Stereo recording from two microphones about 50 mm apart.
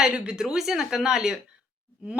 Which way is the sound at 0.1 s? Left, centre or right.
Centre.